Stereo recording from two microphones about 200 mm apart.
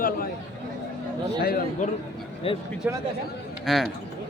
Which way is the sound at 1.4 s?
50° left (ahead or behind).